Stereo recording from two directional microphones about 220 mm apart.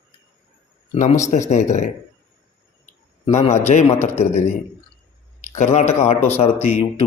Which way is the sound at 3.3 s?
30° left (ahead or behind).